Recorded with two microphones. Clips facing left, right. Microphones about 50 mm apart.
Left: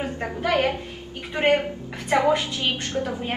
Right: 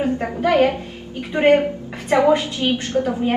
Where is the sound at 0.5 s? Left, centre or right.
Right.